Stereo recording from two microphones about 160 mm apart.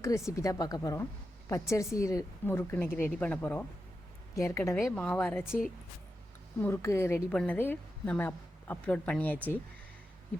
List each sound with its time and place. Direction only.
0.3 s a woman's voice: 20° left (ahead or behind)
6.6 s a woman's voice: 15° left (ahead or behind)